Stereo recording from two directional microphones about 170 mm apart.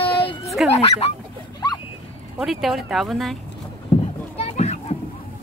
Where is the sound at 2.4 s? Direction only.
Centre (ahead or behind).